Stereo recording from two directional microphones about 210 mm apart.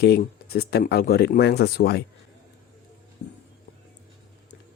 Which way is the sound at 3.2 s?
50° left (ahead or behind).